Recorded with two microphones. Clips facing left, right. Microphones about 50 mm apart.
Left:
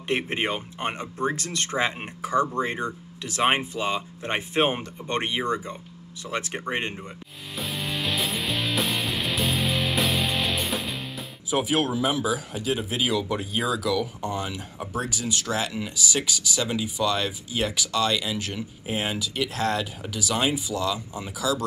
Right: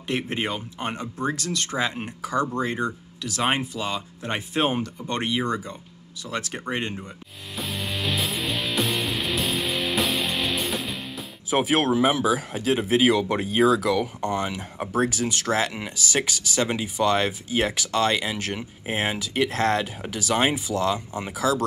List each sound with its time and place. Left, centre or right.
0.1 s speech: left
7.5 s music: centre
11.5 s speech: right